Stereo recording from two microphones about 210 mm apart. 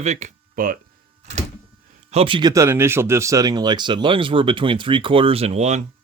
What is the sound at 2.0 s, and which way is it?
Speech, 25° right (ahead or behind).